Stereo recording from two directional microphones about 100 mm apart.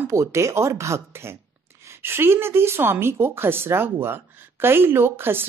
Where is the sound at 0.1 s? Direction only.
30° right (ahead or behind).